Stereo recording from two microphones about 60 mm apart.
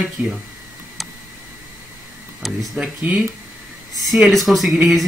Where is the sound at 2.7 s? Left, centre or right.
Right.